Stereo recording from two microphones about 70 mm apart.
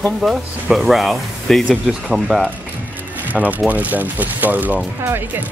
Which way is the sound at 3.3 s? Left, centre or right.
Right.